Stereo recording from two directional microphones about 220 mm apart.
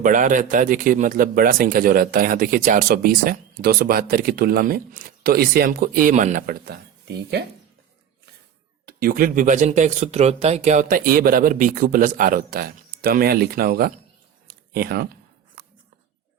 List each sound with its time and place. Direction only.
0.0 s speech: 35° right (ahead or behind)
8.9 s speech: 45° right (ahead or behind)
14.4 s a sound: 45° right (ahead or behind)